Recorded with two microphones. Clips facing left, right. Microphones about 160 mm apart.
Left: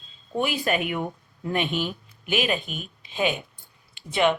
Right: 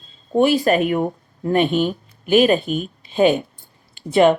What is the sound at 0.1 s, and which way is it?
Speech, 40° right (ahead or behind).